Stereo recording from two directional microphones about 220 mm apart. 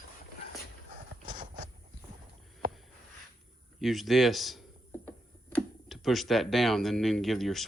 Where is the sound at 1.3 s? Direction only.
35° right (ahead or behind).